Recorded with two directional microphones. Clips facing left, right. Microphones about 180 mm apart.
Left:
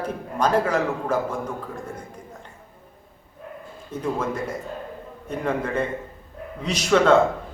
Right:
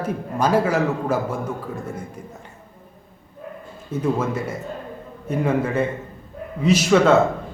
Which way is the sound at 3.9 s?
5° right (ahead or behind).